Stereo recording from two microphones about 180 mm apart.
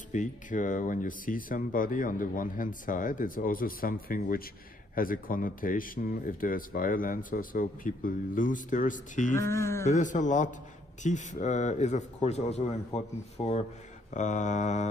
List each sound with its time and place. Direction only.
0.1 s speech: 45° left (ahead or behind)
9.3 s speech: 15° left (ahead or behind)
9.9 s a man's voice: 45° left (ahead or behind)